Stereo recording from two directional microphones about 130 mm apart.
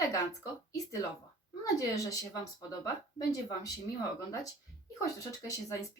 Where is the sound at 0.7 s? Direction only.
25° left (ahead or behind).